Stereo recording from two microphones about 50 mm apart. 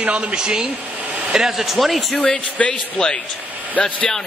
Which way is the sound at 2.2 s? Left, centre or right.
Left.